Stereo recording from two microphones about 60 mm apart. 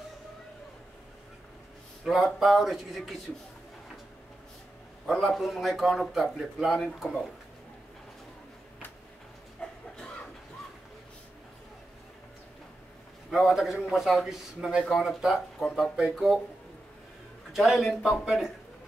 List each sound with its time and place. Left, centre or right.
2.0 s a man's voice: centre
5.0 s a man's voice: centre
9.6 s a sound: centre
13.3 s a man's voice: centre
14.8 s a man's voice: centre
17.5 s a man's voice: centre